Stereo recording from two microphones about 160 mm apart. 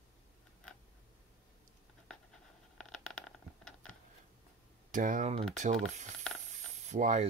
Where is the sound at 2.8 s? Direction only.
5° left (ahead or behind).